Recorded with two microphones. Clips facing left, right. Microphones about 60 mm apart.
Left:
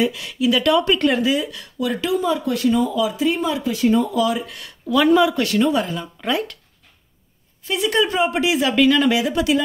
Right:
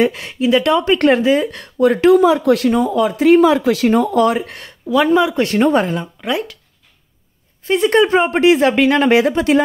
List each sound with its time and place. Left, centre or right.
0.0 s speech: right
0.5 s speech: right
4.9 s speech: right
6.2 s speech: centre
7.6 s speech: right